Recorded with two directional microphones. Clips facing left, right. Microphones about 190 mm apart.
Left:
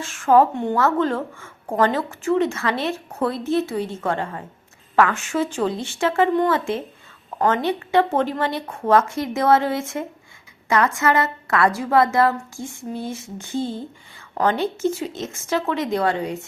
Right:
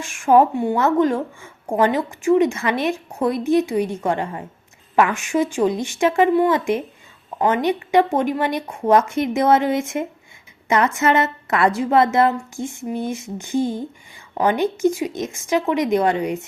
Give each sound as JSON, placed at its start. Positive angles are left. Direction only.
{"t": 0.0, "sound": "a woman's voice", "side_deg": -15}